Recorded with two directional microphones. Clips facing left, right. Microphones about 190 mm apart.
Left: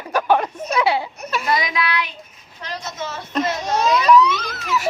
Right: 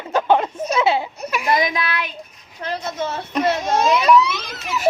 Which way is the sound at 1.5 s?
45° right (ahead or behind).